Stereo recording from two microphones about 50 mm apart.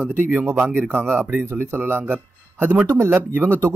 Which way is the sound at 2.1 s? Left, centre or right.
Right.